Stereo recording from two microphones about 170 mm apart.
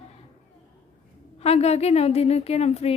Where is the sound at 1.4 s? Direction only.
40° left (ahead or behind).